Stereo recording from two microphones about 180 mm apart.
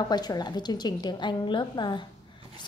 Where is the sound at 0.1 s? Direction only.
20° left (ahead or behind).